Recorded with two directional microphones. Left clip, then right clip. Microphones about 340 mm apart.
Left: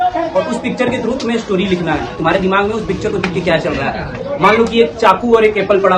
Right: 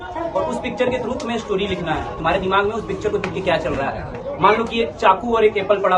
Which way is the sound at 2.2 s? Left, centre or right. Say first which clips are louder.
Left 4 dB; centre.